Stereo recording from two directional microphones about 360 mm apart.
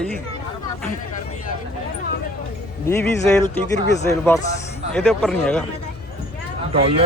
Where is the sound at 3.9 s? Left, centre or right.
Centre.